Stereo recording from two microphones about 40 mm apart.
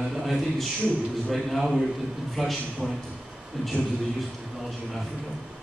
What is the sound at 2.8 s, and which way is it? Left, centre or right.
Speech, centre.